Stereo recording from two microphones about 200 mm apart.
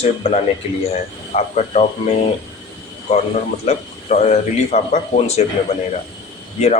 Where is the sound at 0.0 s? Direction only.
30° left (ahead or behind).